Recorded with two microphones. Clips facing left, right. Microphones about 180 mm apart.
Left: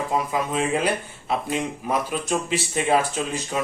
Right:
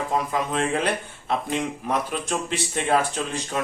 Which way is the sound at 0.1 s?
5° left (ahead or behind).